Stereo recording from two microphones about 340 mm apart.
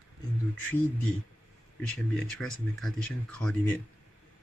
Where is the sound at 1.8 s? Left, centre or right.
Centre.